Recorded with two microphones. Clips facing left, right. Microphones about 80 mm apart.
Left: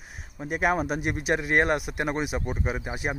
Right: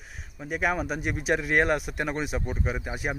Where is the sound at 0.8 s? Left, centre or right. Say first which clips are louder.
Left 1 dB; centre.